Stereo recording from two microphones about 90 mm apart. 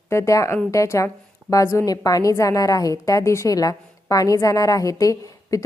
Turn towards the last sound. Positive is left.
turn(degrees=40)  # may be behind; listen again after turning